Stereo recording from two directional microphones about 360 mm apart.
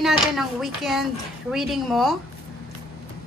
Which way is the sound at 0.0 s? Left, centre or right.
Centre.